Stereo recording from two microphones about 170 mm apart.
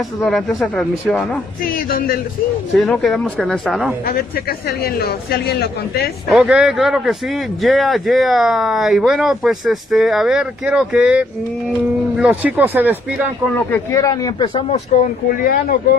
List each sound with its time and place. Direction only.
0.6 s speech: 5° left (ahead or behind)
1.9 s a man's voice: 60° left (ahead or behind)
2.7 s speech: centre (ahead or behind)
4.1 s a man's voice: 65° left (ahead or behind)
6.3 s speech: 5° right (ahead or behind)
13.6 s speech: 15° left (ahead or behind)
15.2 s speech: 55° left (ahead or behind)